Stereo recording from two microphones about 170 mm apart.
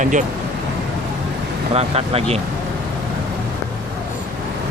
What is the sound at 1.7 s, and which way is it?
Speech, 35° right (ahead or behind).